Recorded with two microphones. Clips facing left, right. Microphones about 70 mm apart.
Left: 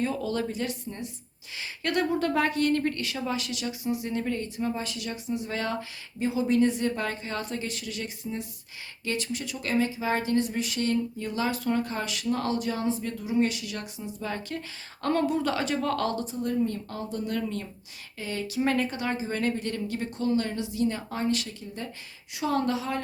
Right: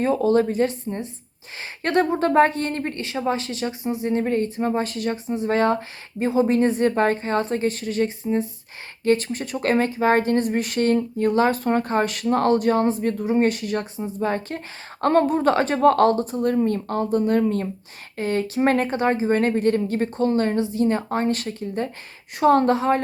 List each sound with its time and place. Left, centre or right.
0.0 s speech: right